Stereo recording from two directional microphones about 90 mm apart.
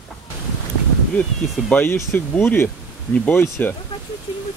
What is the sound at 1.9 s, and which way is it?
Speech, 25° left (ahead or behind).